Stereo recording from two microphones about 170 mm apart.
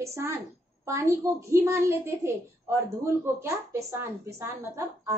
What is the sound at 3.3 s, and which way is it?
A woman's voice, 15° right (ahead or behind).